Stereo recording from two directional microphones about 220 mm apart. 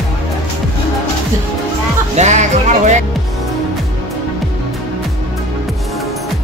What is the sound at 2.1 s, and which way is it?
Speech, 30° right (ahead or behind).